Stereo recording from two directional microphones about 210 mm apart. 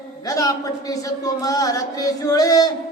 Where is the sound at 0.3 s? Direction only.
15° left (ahead or behind).